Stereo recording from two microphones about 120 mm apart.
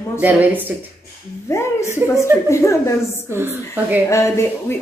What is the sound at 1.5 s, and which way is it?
A woman's voice, 25° left (ahead or behind).